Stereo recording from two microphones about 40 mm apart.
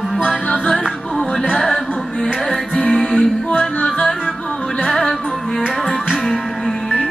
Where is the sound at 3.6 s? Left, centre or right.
Left.